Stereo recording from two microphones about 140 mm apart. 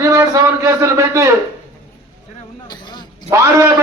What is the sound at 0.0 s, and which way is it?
A man's voice, 20° right (ahead or behind).